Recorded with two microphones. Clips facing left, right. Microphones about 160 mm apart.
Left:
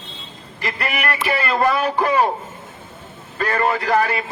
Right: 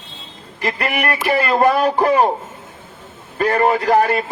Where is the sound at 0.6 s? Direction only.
40° right (ahead or behind).